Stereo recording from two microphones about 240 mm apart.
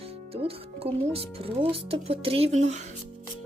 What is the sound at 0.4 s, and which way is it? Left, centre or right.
Speech, right.